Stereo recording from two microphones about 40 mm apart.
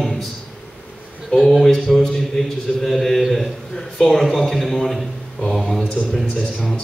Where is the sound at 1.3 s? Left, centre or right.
Centre.